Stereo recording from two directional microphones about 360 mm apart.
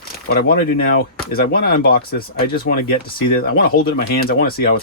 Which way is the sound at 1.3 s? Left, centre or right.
Left.